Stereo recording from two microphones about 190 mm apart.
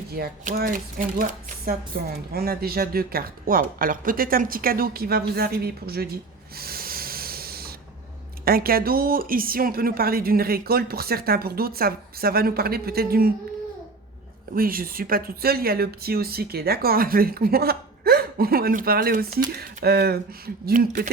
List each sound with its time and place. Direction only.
0.1 s a woman's voice: 55° right (ahead or behind)
6.6 s sanding: 50° right (ahead or behind)
8.4 s a woman's voice: 50° right (ahead or behind)
14.5 s a woman's voice: 50° right (ahead or behind)
20.7 s a woman's voice: 45° right (ahead or behind)